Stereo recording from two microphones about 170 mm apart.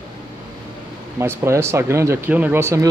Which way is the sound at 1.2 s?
15° right (ahead or behind).